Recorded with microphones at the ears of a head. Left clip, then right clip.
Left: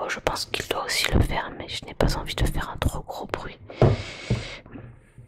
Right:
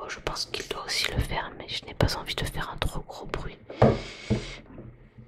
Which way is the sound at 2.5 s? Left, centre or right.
Left.